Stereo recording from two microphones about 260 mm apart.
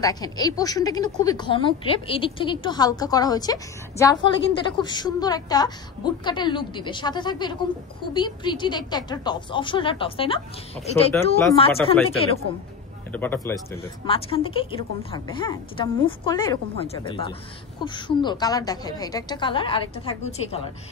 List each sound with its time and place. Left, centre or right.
0.0 s a woman's voice: centre
11.4 s a woman's voice: left
13.1 s a woman's voice: centre
13.7 s a woman's voice: left